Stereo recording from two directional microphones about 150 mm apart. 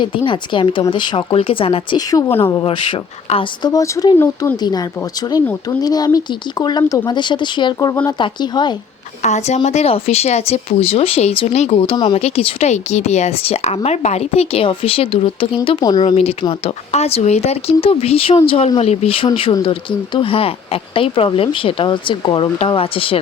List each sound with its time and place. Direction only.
0.0 s speech: 35° left (ahead or behind)
2.0 s speech: 25° left (ahead or behind)
2.6 s speech: 35° left (ahead or behind)
3.7 s speech: 25° left (ahead or behind)
9.2 s a woman's voice: 50° left (ahead or behind)